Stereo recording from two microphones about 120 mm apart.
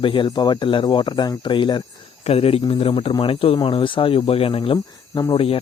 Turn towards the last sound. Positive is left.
turn(degrees=50)  # may be behind; listen again after turning